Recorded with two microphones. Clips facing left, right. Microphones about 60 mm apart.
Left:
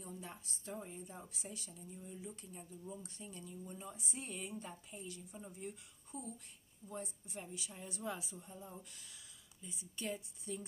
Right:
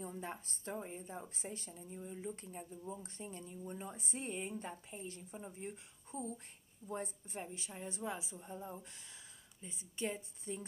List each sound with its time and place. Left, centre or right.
0.0 s a woman's voice: right
8.4 s a woman's voice: right